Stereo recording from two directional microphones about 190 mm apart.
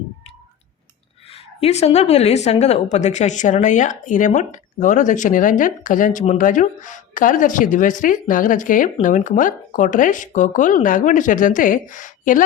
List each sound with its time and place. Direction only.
1.3 s a woman's voice: 35° left (ahead or behind)